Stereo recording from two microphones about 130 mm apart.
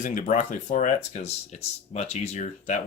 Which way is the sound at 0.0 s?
85° left.